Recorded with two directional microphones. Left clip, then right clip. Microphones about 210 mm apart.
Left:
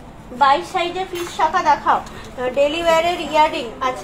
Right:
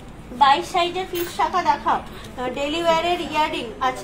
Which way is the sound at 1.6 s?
40° right (ahead or behind).